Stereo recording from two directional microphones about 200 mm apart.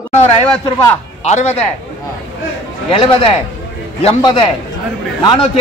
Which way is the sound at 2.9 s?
30° left (ahead or behind).